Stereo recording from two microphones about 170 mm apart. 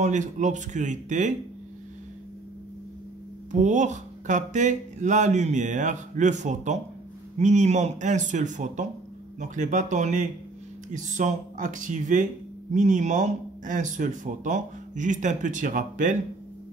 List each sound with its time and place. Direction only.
0.0 s speech: 45° right (ahead or behind)
3.5 s speech: 45° right (ahead or behind)